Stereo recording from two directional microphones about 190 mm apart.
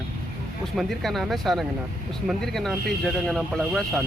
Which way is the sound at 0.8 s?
Centre (ahead or behind).